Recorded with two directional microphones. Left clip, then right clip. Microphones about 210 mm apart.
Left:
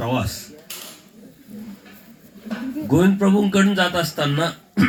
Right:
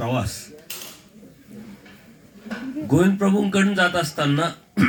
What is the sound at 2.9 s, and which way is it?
Speech, 25° right (ahead or behind).